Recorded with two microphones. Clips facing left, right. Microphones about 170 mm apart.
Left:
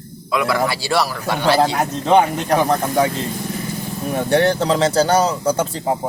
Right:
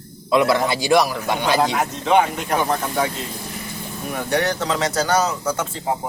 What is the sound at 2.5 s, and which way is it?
Speech, 40° left (ahead or behind).